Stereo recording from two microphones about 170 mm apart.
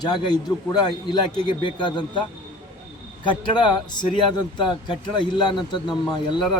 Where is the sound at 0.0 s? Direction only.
25° left (ahead or behind).